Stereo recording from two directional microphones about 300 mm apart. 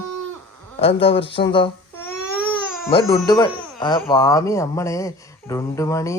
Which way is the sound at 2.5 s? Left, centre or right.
Centre.